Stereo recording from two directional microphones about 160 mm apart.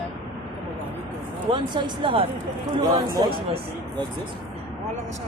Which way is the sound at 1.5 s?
30° right (ahead or behind).